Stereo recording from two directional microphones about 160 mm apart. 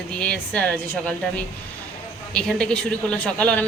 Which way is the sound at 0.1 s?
5° left (ahead or behind).